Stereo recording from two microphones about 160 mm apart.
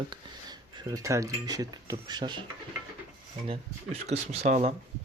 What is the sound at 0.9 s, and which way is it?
Speech, 20° right (ahead or behind).